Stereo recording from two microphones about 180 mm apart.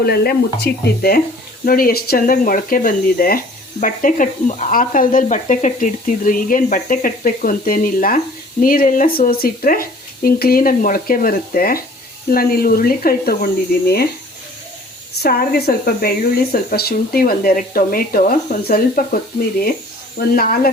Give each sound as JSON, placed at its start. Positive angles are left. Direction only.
{"t": 0.0, "sound": "speech", "side_deg": 60}
{"t": 15.2, "sound": "speech", "side_deg": 60}